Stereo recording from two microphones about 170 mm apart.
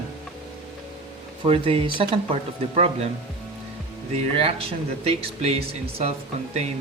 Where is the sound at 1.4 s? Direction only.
30° right (ahead or behind).